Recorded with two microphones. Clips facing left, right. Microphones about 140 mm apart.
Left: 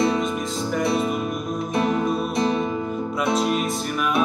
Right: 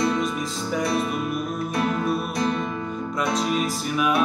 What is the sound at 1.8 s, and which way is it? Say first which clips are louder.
Music: left 2 dB; 20° left (ahead or behind).